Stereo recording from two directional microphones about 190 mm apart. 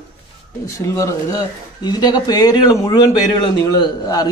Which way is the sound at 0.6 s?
15° left (ahead or behind).